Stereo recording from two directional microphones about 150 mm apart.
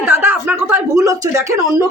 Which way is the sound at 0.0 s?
10° right (ahead or behind).